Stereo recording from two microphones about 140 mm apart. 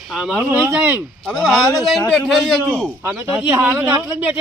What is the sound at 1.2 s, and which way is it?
Speech, centre (ahead or behind).